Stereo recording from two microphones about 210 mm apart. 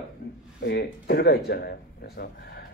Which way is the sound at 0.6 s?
50° left (ahead or behind).